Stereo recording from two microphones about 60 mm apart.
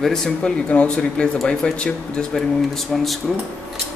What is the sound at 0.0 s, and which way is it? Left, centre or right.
Speech, centre.